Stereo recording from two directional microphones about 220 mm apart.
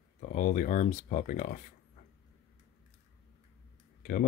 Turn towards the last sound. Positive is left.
turn(degrees=40)  # may be behind; listen again after turning